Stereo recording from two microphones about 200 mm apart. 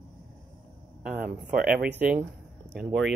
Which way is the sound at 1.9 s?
10° right (ahead or behind).